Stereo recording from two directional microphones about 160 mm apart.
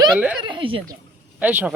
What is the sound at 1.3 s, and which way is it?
Speech, 10° right (ahead or behind).